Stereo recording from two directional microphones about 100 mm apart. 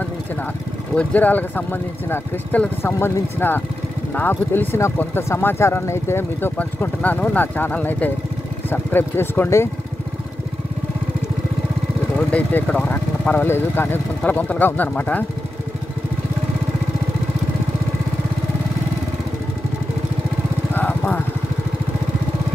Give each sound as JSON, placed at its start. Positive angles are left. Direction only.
{"t": 0.9, "sound": "speech", "side_deg": 15}
{"t": 12.3, "sound": "speech", "side_deg": 15}
{"t": 20.7, "sound": "vehicle", "side_deg": 15}